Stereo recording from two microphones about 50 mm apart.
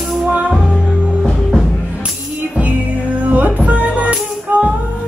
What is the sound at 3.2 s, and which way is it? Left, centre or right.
Music, right.